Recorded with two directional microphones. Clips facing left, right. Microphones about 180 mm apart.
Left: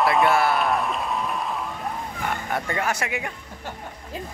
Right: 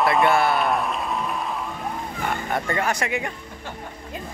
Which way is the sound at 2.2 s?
5° left (ahead or behind).